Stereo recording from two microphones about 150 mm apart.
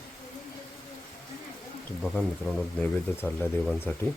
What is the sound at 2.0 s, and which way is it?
Speech, centre (ahead or behind).